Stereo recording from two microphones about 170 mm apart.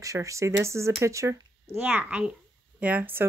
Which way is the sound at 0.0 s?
20° right (ahead or behind).